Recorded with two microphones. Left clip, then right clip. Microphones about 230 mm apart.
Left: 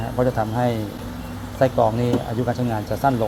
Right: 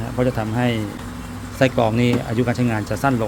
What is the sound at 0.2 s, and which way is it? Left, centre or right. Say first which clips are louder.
Speech: left 1 dB; right.